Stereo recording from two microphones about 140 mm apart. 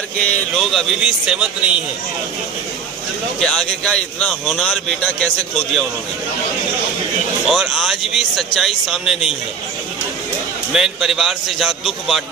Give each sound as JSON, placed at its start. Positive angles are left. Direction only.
{"t": 0.3, "sound": "speech", "side_deg": 0}
{"t": 3.4, "sound": "speech", "side_deg": 5}
{"t": 7.4, "sound": "speech", "side_deg": 0}
{"t": 10.7, "sound": "speech", "side_deg": -5}